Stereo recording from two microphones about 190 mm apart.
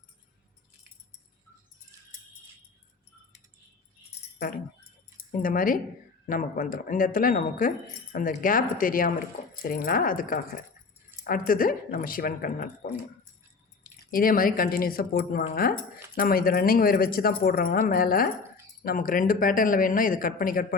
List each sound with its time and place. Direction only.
4.4 s a sound: 50° left (ahead or behind)
5.3 s speech: 45° left (ahead or behind)
14.1 s speech: 50° left (ahead or behind)